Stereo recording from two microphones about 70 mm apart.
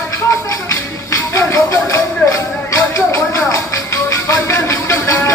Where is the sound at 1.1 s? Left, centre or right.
Left.